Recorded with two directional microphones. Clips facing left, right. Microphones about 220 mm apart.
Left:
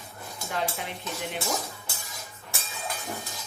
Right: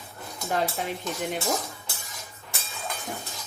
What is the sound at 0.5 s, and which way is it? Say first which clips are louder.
Speech: right 4 dB; 45° right (ahead or behind).